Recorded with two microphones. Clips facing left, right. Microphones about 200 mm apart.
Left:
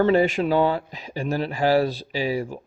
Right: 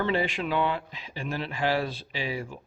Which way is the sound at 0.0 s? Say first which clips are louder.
Left 9 dB; 45° left (ahead or behind).